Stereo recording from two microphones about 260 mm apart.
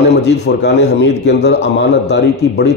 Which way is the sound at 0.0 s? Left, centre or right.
Left.